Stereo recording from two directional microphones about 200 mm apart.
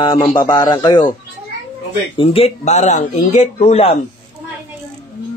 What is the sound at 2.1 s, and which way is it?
Speech, 30° left (ahead or behind).